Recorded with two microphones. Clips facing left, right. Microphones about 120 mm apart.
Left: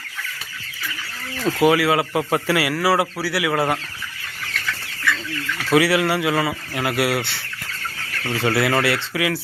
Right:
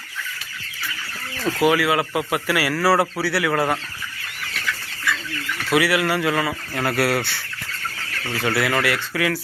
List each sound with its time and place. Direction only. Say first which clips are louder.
1.5 s speech: left 2 dB; 20° left (ahead or behind)
5.7 s speech: left 2 dB; 30° left (ahead or behind); by 7.3 s 10° left (ahead or behind)
8.4 s speech: left 2 dB; 25° left (ahead or behind)